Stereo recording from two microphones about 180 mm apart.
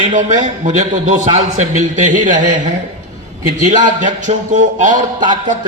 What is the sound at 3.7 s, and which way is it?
A man's voice, 45° right (ahead or behind).